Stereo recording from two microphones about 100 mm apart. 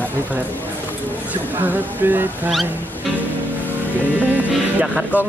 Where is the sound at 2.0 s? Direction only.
20° right (ahead or behind).